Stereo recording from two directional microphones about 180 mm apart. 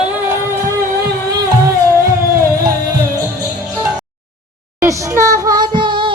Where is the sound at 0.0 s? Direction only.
10° right (ahead or behind).